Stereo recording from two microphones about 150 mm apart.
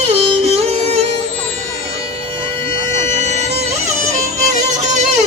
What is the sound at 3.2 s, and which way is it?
Music, 50° right (ahead or behind).